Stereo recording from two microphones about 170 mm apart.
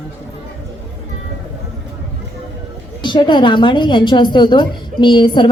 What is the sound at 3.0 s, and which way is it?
Speech, 25° left (ahead or behind).